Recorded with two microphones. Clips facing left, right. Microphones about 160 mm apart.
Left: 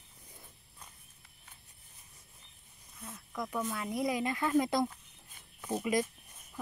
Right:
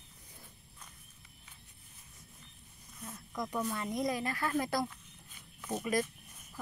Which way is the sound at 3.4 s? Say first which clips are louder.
Even; 5° left (ahead or behind).